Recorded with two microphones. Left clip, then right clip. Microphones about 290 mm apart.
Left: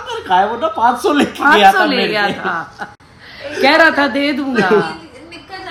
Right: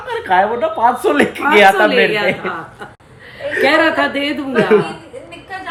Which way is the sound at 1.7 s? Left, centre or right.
Left.